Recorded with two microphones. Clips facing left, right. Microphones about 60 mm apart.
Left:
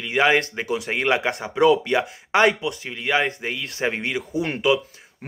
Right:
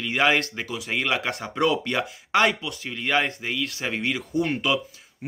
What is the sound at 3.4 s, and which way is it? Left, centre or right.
Speech, centre.